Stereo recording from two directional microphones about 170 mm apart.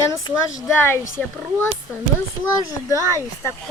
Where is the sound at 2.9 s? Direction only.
20° right (ahead or behind).